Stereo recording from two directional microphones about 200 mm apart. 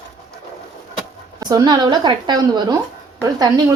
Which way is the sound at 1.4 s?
20° right (ahead or behind).